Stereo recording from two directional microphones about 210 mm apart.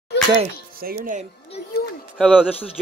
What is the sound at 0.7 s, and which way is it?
Speech, 40° right (ahead or behind).